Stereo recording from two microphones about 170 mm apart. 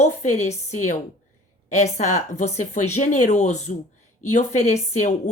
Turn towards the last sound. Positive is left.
turn(degrees=45)  # may be behind; listen again after turning